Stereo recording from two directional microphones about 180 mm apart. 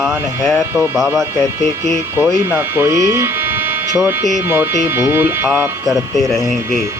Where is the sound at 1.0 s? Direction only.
15° right (ahead or behind).